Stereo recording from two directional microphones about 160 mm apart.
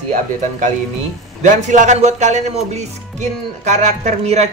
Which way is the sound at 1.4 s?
50° right (ahead or behind).